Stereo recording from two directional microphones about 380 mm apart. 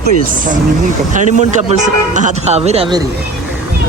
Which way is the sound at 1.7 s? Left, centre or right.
Centre.